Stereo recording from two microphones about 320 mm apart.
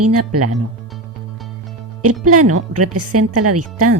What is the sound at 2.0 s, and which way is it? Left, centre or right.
Speech, right.